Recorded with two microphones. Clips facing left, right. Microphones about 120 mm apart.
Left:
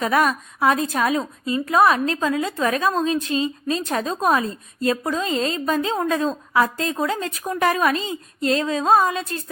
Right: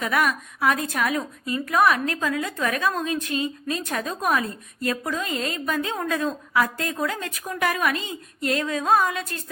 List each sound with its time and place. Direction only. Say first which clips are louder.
0.0 s a woman's voice: left 4 dB; 30° left (ahead or behind)